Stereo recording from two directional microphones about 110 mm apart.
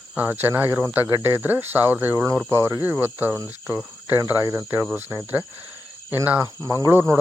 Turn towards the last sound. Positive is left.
turn(degrees=-25)  # may be behind; listen again after turning